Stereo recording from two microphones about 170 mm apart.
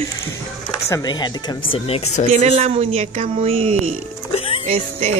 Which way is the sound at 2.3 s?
40° right (ahead or behind).